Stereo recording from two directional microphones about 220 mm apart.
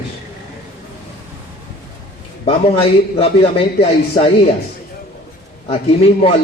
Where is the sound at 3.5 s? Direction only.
25° left (ahead or behind).